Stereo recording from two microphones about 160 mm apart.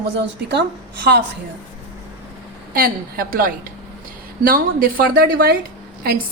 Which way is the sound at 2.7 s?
65° right (ahead or behind).